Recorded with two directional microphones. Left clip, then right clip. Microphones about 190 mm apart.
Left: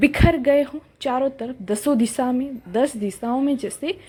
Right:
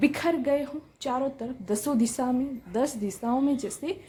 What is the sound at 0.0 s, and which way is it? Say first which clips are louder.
A woman's voice: left 7 dB; 20° left (ahead or behind).